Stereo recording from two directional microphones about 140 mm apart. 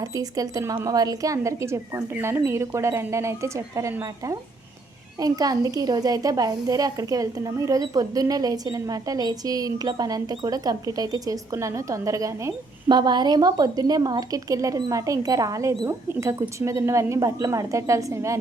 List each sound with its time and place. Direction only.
0.0 s a woman's voice: 25° right (ahead or behind)